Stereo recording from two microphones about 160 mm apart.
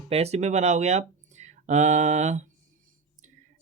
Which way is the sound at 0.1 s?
40° right (ahead or behind).